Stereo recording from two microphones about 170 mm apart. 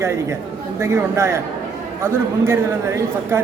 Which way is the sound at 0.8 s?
15° right (ahead or behind).